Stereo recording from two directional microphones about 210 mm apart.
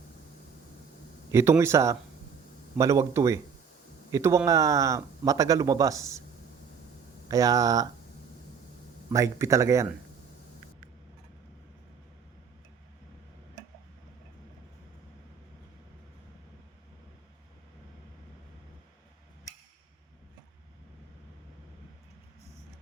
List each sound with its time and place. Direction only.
1.3 s speech: 15° right (ahead or behind)
7.3 s speech: 15° right (ahead or behind)
9.1 s speech: 15° right (ahead or behind)